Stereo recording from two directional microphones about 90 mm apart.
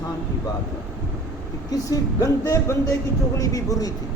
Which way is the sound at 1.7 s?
45° left (ahead or behind).